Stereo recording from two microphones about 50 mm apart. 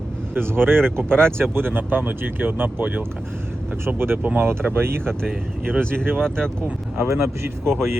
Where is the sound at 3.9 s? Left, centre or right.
Right.